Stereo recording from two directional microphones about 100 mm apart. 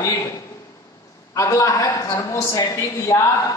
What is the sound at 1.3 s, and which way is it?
A man's voice, 35° left (ahead or behind).